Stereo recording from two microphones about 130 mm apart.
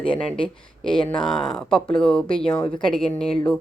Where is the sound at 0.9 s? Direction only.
40° left (ahead or behind).